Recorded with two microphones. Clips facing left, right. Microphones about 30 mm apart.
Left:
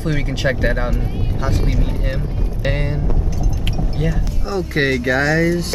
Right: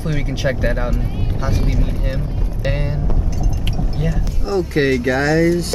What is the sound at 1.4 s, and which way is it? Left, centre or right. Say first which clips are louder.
Speech: even; centre.